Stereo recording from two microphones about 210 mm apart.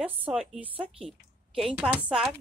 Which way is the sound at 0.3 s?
5° right (ahead or behind).